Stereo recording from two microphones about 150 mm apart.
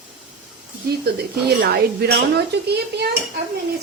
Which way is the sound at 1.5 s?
90° right.